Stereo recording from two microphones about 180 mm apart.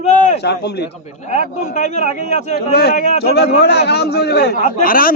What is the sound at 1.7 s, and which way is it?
Speech, 40° left (ahead or behind).